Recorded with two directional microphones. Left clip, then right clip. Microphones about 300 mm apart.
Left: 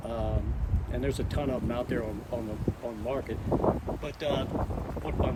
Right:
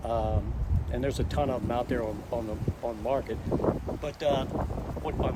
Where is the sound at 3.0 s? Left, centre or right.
Centre.